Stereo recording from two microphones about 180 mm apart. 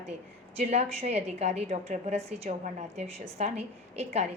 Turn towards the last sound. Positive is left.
turn(degrees=-35)  # may be behind; listen again after turning